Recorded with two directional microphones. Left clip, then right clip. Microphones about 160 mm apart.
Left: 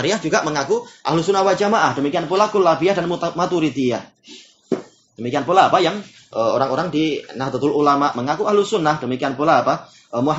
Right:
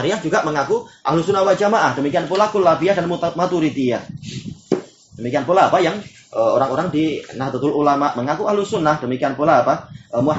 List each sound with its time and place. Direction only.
0.0 s speech: 35° left (ahead or behind)
5.2 s speech: 30° left (ahead or behind)